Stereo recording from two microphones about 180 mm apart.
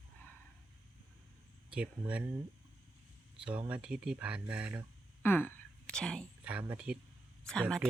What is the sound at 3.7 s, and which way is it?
Speech, 5° right (ahead or behind).